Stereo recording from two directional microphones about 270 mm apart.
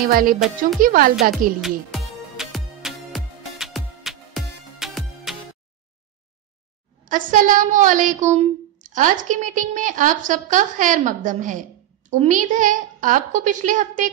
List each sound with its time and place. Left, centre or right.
0.0 s music: right
1.6 s music: centre
7.1 s a woman's voice: right